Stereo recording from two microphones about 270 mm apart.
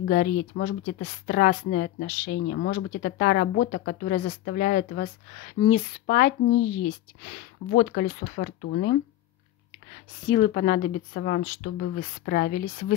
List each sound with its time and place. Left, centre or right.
0.0 s speech: left
10.2 s speech: left